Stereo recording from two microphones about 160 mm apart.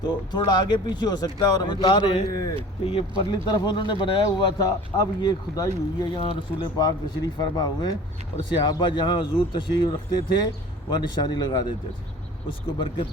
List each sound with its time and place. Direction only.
0.0 s speech: 25° left (ahead or behind)
3.3 s speech: 25° left (ahead or behind)